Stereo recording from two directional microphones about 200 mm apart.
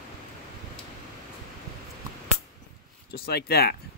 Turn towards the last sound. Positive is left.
turn(degrees=50)  # may be behind; listen again after turning